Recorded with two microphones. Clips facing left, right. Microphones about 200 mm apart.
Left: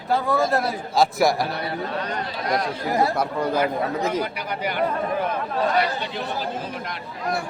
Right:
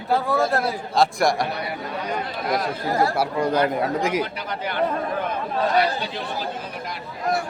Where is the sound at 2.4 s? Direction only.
5° right (ahead or behind).